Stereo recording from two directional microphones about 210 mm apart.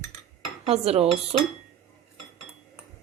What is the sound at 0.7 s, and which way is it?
Speech, 30° right (ahead or behind).